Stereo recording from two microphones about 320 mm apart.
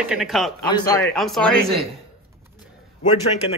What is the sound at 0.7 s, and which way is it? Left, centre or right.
Speech, centre.